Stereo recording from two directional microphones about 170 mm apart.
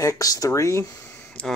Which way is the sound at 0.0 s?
20° left (ahead or behind).